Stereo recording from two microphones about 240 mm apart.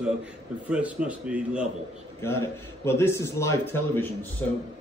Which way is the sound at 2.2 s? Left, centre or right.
Centre.